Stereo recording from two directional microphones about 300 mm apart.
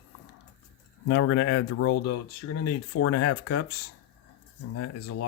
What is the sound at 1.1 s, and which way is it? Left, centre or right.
Speech, left.